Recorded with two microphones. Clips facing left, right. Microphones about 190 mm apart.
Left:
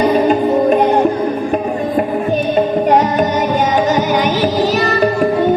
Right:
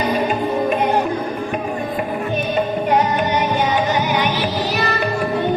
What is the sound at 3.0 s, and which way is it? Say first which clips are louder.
Music: left 4 dB; 40° left (ahead or behind).